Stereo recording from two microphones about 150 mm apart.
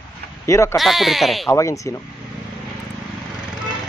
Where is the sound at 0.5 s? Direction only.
20° left (ahead or behind).